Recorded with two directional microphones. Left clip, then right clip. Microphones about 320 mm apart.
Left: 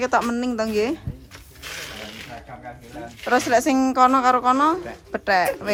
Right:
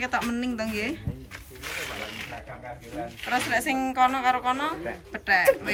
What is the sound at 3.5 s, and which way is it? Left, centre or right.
Speech, centre.